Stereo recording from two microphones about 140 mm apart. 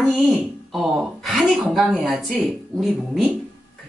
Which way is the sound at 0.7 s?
Centre (ahead or behind).